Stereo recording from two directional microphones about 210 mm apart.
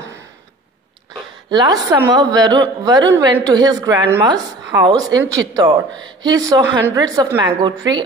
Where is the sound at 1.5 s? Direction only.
20° right (ahead or behind).